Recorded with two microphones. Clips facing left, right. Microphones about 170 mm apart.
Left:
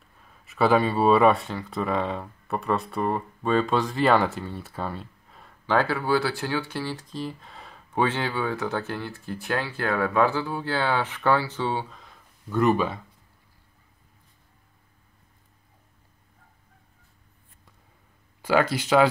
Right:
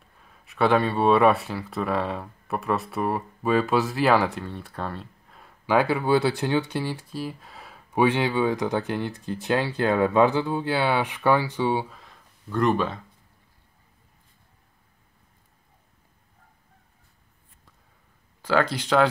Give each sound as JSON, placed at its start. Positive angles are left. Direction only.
{"t": 0.5, "sound": "speech", "side_deg": 0}
{"t": 5.8, "sound": "speech", "side_deg": -15}
{"t": 12.0, "sound": "a sound", "side_deg": 0}
{"t": 18.4, "sound": "speech", "side_deg": 10}